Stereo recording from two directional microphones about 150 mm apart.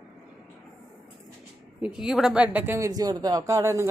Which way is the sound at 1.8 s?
5° right (ahead or behind).